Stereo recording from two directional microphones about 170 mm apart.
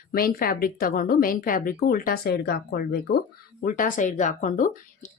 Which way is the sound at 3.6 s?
50° left (ahead or behind).